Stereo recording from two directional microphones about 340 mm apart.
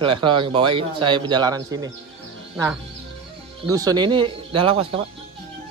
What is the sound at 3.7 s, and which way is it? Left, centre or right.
Speech, centre.